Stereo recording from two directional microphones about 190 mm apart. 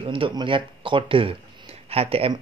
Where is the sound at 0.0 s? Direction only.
30° right (ahead or behind).